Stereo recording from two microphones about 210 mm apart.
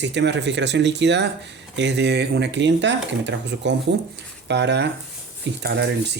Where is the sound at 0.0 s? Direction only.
55° right (ahead or behind).